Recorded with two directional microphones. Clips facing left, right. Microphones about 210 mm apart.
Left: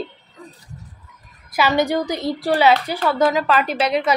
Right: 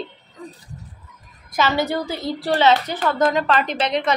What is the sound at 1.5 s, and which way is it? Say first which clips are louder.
A woman's voice: left 2 dB; 15° left (ahead or behind).